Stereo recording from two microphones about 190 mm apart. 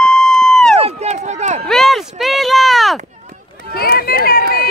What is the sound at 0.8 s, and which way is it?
Run, 35° right (ahead or behind).